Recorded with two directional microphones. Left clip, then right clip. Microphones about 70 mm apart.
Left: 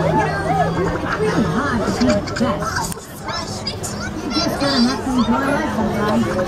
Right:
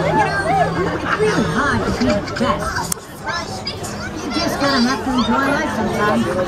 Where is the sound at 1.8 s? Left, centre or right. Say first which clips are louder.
Even; centre.